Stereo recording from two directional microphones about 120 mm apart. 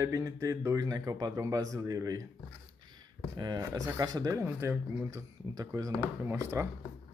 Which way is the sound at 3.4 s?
35° right (ahead or behind).